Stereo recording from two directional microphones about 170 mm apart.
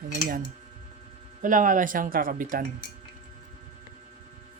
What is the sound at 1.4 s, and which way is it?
Speech, 50° right (ahead or behind).